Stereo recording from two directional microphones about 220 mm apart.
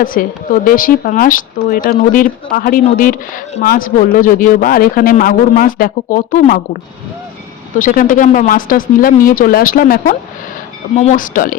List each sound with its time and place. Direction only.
0.0 s speech: 40° left (ahead or behind)
7.8 s speech: 35° left (ahead or behind)